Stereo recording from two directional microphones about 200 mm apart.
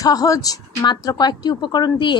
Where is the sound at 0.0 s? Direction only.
15° left (ahead or behind).